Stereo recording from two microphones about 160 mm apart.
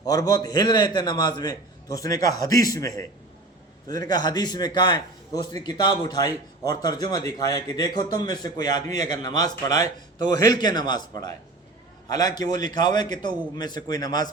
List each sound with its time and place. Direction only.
0.0 s a man's voice: 25° left (ahead or behind)